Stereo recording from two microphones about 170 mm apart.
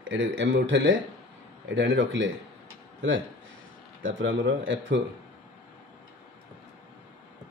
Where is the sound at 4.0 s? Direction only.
90° right.